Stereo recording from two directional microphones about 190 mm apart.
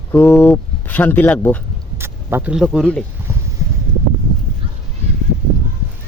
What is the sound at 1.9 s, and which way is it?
Speech, 10° right (ahead or behind).